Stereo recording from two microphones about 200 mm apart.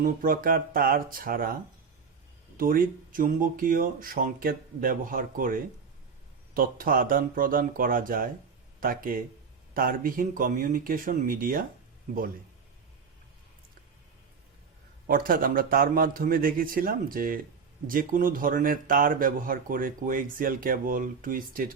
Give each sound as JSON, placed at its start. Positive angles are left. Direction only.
{"t": 0.0, "sound": "a man's voice", "side_deg": -45}
{"t": 2.6, "sound": "a man's voice", "side_deg": -45}
{"t": 15.0, "sound": "a man's voice", "side_deg": -45}